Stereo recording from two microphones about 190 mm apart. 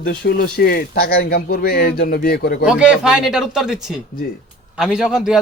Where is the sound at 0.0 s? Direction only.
50° left (ahead or behind).